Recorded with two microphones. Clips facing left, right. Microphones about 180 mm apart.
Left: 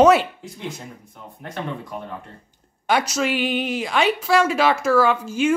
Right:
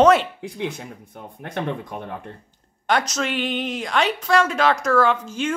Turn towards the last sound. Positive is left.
turn(degrees=10)  # may be behind; listen again after turning